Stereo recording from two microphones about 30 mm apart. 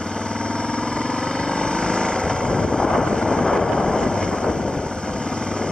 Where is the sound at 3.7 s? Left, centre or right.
Left.